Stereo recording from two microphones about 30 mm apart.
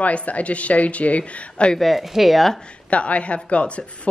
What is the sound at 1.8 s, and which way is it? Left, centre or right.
Speech, centre.